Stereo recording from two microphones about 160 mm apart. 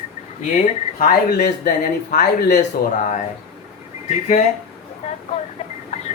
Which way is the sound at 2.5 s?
50° left (ahead or behind).